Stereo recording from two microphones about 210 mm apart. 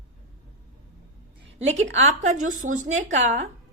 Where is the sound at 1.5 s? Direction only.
30° right (ahead or behind).